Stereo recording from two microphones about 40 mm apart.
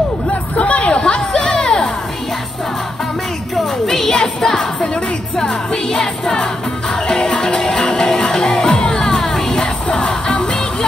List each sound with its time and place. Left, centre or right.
0.3 s hubbub: left
1.3 s a sound: centre
3.8 s music: centre